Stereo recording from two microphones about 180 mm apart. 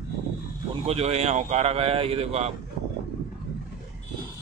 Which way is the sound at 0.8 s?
35° right (ahead or behind).